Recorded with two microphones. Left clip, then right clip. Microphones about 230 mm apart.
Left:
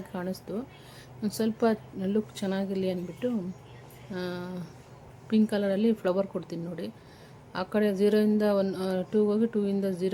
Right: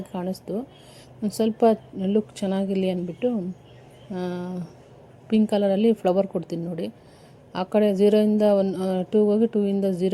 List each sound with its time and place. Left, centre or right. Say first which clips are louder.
0.1 s a woman's voice: right 5 dB; centre